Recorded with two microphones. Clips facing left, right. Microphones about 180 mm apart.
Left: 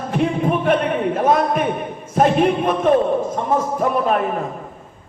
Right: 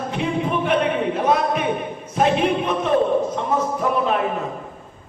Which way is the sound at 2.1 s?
50° left (ahead or behind).